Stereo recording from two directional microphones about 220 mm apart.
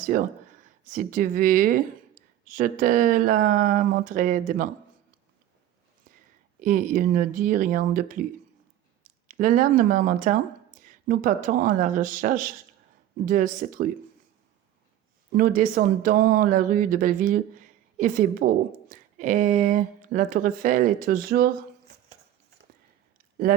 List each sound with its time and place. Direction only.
0.0 s speech: 40° right (ahead or behind)
6.1 s a sound: 40° right (ahead or behind)
6.6 s speech: 35° right (ahead or behind)
9.2 s speech: 35° right (ahead or behind)
15.4 s speech: 40° right (ahead or behind)